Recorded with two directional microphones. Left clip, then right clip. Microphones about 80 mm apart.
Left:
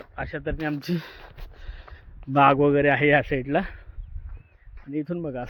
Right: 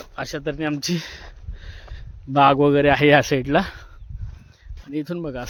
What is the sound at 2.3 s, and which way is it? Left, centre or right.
Speech, right.